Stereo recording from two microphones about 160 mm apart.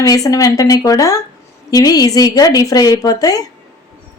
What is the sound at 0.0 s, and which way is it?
Speech, 20° left (ahead or behind).